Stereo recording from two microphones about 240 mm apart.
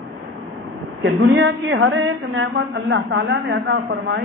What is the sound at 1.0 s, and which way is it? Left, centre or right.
A woman's voice, right.